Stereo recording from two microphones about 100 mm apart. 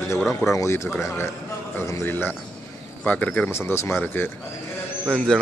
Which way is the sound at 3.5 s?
25° left (ahead or behind).